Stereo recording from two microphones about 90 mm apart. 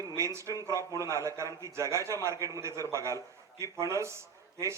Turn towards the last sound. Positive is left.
turn(degrees=-30)  # may be behind; listen again after turning